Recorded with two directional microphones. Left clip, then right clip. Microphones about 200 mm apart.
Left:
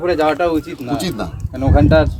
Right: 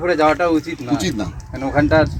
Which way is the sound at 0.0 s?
30° left (ahead or behind).